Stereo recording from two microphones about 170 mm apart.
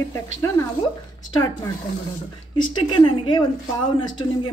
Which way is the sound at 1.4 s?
20° left (ahead or behind).